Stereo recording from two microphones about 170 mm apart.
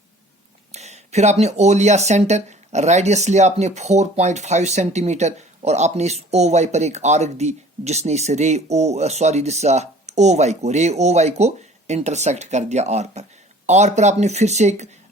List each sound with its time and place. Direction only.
0.7 s speech: 40° right (ahead or behind)